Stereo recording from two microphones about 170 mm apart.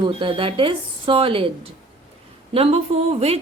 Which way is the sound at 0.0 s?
30° right (ahead or behind).